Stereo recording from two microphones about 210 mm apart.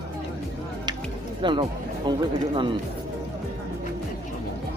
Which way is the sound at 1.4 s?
25° right (ahead or behind).